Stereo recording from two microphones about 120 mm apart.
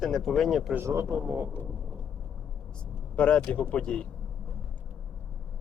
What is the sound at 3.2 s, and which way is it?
Speech, 10° left (ahead or behind).